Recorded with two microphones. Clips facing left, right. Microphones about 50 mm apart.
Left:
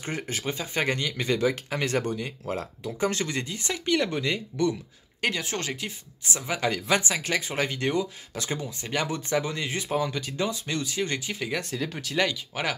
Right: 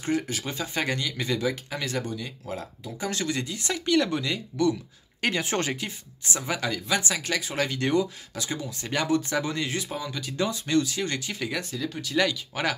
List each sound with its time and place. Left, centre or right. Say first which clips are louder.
0.0 s speech: right 4 dB; left
0.5 s speech: left 3 dB; centre
0.8 s speech: left 2 dB; left
3.1 s speech: even; left
5.3 s speech: right 4 dB; right
5.8 s speech: right 1 dB; centre
7.0 s speech: left 1 dB; left
8.4 s speech: left 1 dB; left
8.8 s speech: right 5 dB; centre
11.7 s speech: left 1 dB; left
12.2 s speech: right 1 dB; centre